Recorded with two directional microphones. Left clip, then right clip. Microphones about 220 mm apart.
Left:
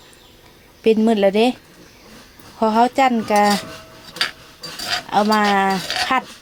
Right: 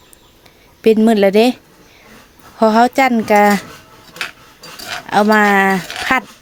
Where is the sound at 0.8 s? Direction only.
40° right (ahead or behind).